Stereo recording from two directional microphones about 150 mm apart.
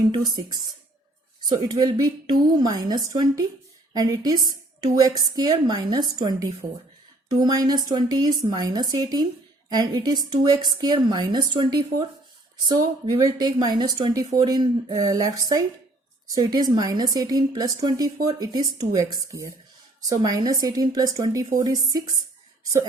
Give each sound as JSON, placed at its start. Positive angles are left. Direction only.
{"t": 0.1, "sound": "a woman's voice", "side_deg": -25}
{"t": 1.5, "sound": "a woman's voice", "side_deg": -25}